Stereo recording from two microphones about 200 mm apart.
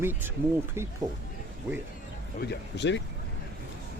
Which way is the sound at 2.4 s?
55° left (ahead or behind).